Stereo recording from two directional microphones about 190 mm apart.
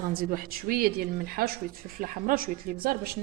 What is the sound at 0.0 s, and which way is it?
Speech, 50° right (ahead or behind).